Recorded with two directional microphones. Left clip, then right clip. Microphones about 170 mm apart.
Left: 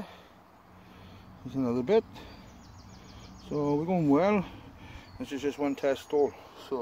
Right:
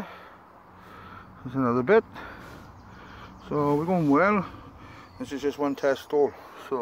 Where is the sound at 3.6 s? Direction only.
30° right (ahead or behind).